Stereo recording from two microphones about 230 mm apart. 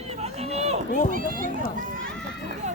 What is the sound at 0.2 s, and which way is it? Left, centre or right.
Run, right.